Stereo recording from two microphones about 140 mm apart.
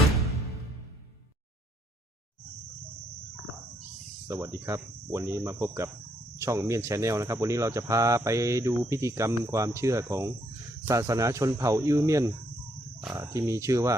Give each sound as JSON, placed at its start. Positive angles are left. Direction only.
{"t": 4.3, "sound": "speech", "side_deg": -20}